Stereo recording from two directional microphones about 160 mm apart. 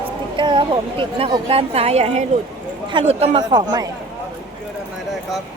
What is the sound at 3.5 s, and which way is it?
Speech, 25° right (ahead or behind).